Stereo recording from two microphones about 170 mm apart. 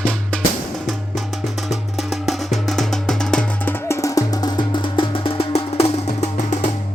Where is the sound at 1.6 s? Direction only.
Centre (ahead or behind).